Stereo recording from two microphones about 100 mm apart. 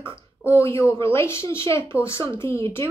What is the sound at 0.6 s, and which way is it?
A woman's voice, 25° left (ahead or behind).